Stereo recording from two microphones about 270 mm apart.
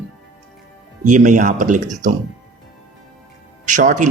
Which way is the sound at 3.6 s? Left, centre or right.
Right.